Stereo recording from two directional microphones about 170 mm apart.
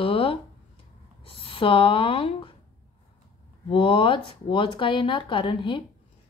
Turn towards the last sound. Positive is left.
turn(degrees=30)  # may be behind; listen again after turning